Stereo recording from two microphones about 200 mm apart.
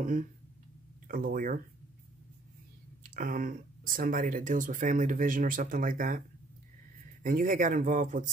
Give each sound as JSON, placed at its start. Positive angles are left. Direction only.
{"t": 0.0, "sound": "speech", "side_deg": -40}
{"t": 3.0, "sound": "speech", "side_deg": -45}
{"t": 7.2, "sound": "speech", "side_deg": -40}